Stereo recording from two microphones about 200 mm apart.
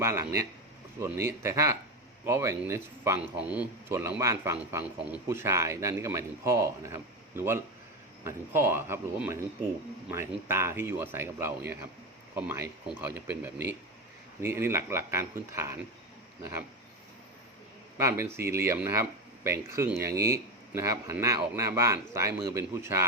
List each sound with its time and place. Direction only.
0.0 s speech: 15° right (ahead or behind)
18.1 s speech: 10° right (ahead or behind)